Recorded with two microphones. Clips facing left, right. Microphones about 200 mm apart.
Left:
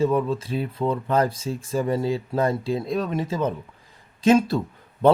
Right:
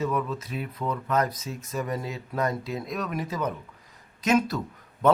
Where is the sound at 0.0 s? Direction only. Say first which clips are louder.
Left 7 dB; 30° left (ahead or behind).